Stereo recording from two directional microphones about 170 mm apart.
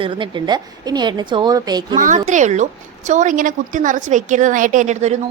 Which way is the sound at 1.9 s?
45° right (ahead or behind).